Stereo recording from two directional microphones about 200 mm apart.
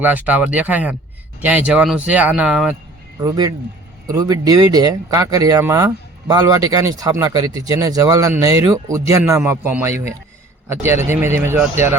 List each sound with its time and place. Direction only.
0.0 s speech: 10° right (ahead or behind)
3.2 s speech: 20° right (ahead or behind)